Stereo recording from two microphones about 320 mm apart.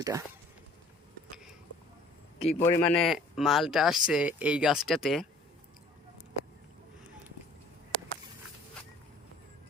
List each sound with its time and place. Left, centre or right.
0.0 s speech: centre
2.4 s a man's voice: centre
2.8 s speech: centre